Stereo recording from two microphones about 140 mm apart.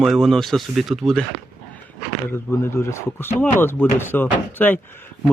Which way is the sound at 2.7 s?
20° left (ahead or behind).